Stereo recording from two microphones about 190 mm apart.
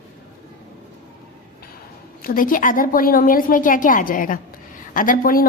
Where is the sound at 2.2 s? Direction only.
45° left (ahead or behind).